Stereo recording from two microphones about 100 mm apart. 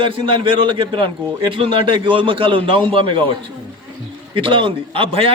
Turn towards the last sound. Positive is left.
turn(degrees=-65)  # may be behind; listen again after turning